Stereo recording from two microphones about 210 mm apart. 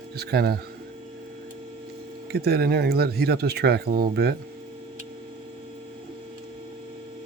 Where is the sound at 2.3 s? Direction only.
50° right (ahead or behind).